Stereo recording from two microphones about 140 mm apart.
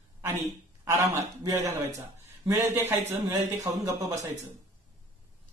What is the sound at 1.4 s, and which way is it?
Speech, 25° right (ahead or behind).